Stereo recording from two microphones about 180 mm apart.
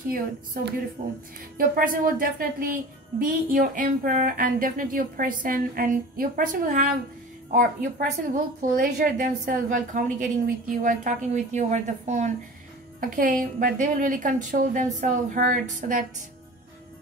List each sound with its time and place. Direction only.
1.0 s speech: 50° right (ahead or behind)